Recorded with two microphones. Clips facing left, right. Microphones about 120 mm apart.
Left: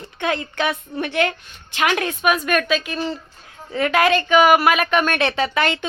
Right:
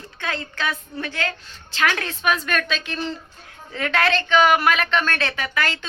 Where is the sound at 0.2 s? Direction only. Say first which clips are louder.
Left 6 dB; 20° left (ahead or behind).